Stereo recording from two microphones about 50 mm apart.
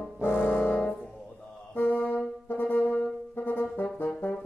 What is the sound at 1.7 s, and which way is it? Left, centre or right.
Brass instrument, left.